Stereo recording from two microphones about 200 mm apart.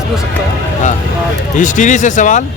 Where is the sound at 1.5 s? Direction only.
40° left (ahead or behind).